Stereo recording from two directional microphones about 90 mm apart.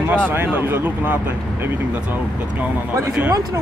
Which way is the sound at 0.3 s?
25° right (ahead or behind).